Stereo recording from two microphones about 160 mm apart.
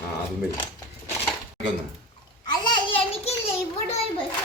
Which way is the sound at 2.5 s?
25° left (ahead or behind).